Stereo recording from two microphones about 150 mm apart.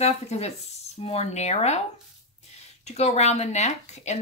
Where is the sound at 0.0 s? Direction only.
45° left (ahead or behind).